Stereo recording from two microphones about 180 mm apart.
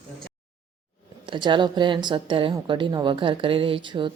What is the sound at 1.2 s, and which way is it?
Speech, 25° right (ahead or behind).